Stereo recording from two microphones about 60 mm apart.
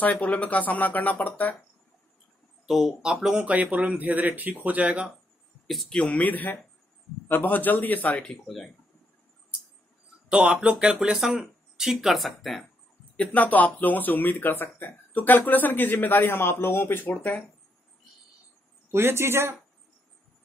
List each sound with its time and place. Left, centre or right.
0.0 s speech: left
2.6 s speech: centre
3.3 s speech: right
5.7 s speech: centre
6.0 s speech: left
8.5 s speech: centre
10.3 s speech: centre
13.1 s speech: left
18.9 s speech: right